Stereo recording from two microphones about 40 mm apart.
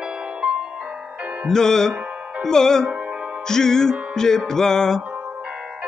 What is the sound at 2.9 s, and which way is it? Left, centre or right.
Music, right.